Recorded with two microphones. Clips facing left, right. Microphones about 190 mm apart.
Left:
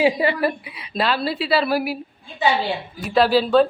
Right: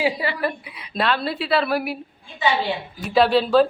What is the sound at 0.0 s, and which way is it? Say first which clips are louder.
Speech: left 5 dB; 25° left (ahead or behind).